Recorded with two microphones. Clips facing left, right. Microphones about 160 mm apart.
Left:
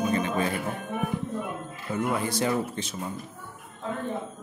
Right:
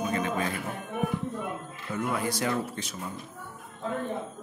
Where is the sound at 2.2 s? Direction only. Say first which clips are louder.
Left 2 dB; 25° left (ahead or behind).